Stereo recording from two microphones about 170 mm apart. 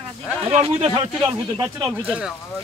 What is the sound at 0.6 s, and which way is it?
Speech, 35° right (ahead or behind).